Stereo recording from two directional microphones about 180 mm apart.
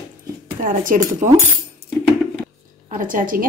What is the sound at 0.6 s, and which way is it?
Speech, 50° right (ahead or behind).